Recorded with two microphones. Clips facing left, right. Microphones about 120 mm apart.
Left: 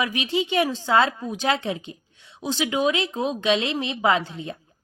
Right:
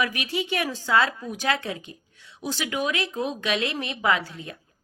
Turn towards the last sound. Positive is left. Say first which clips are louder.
# left 3 dB
turn(degrees=25)  # may be behind; listen again after turning